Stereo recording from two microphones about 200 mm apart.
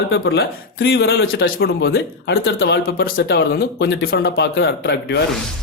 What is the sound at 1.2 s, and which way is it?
A man's voice, 50° left (ahead or behind).